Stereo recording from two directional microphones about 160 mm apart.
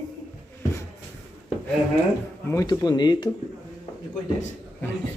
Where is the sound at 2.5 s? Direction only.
20° left (ahead or behind).